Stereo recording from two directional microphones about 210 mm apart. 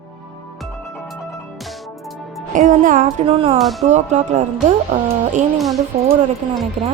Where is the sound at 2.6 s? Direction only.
40° right (ahead or behind).